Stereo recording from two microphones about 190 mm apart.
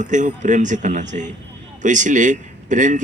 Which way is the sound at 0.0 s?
40° right (ahead or behind).